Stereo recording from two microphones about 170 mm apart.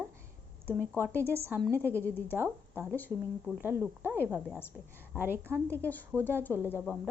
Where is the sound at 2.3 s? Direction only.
15° right (ahead or behind).